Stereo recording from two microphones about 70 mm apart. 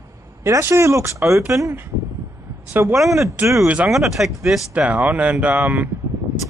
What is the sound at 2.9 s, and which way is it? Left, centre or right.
Speech, centre.